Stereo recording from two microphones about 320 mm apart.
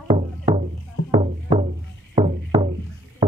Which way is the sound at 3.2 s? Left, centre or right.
Centre.